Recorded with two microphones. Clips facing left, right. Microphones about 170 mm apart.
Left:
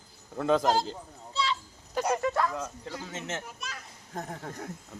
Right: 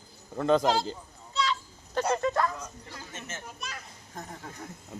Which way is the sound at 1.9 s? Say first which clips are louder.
Right 1 dB; 10° left (ahead or behind).